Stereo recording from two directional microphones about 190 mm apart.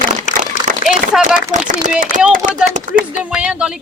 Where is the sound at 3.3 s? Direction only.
5° right (ahead or behind).